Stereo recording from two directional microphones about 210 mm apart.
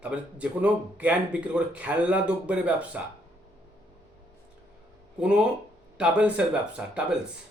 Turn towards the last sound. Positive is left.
turn(degrees=-5)  # may be behind; listen again after turning